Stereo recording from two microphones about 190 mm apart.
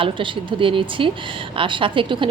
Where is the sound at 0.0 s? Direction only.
25° right (ahead or behind).